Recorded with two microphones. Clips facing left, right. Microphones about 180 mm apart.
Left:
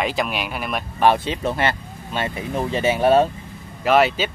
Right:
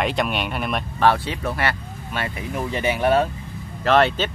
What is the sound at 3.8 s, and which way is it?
Speech, 10° left (ahead or behind).